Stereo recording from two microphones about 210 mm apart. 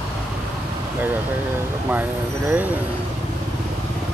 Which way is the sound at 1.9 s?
10° right (ahead or behind).